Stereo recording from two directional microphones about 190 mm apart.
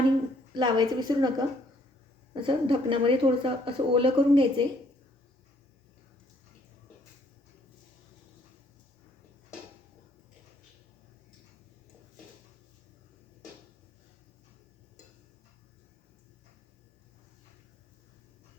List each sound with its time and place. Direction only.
0.5 s speech: 25° right (ahead or behind)